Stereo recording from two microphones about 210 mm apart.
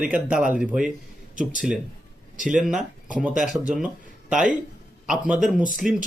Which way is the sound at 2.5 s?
Centre (ahead or behind).